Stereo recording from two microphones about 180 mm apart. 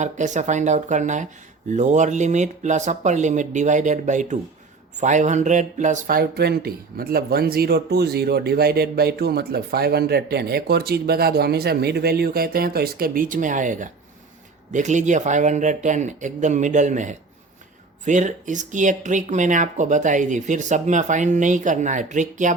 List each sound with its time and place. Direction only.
0.0 s speech: 40° right (ahead or behind)